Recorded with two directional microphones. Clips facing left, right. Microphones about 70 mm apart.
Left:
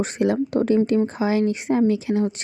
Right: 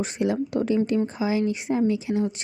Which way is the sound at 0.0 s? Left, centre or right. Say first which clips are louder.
Left 4 dB; left.